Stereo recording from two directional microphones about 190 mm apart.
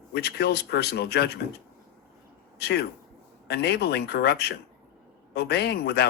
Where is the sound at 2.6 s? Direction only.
60° left (ahead or behind).